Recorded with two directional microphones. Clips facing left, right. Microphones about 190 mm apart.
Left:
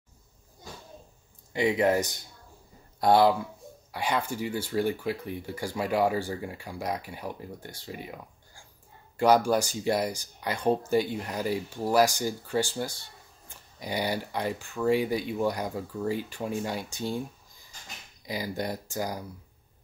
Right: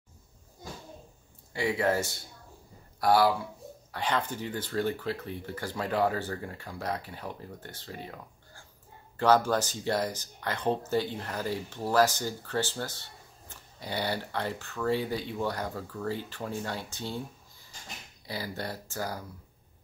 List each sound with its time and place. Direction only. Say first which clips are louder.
1.5 s speech: left 4 dB; 20° left (ahead or behind)
3.9 s speech: left 1 dB; 10° left (ahead or behind)